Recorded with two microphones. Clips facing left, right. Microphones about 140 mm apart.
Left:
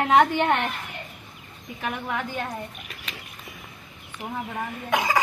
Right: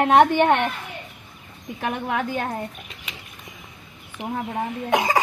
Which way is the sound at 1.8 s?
55° right (ahead or behind).